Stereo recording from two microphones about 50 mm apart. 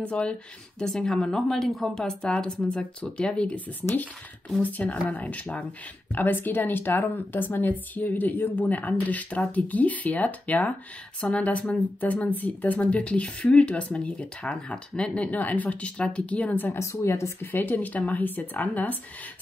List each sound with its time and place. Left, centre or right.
0.1 s speech: left
0.8 s a woman's voice: centre
2.2 s speech: left
6.1 s speech: left
16.7 s speech: left
17.4 s speech: left